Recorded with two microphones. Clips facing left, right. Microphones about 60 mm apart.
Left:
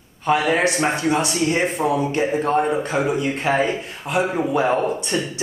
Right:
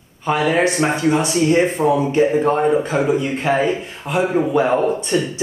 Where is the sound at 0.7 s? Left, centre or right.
Centre.